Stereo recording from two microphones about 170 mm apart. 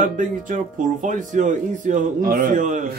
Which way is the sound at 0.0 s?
50° right (ahead or behind).